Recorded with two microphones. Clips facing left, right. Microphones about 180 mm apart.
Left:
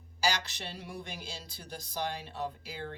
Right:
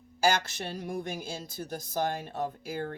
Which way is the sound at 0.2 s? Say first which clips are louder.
Right 6 dB; 50° right (ahead or behind).